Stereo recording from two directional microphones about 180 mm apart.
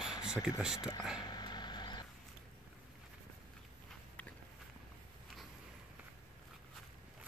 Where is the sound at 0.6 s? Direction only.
5° right (ahead or behind).